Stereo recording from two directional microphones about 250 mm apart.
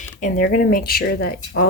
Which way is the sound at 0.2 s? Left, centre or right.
Left.